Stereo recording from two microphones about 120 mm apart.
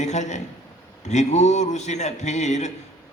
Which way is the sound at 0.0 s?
75° left (ahead or behind).